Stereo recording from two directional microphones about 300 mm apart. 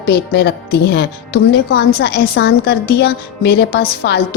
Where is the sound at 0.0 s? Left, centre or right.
Left.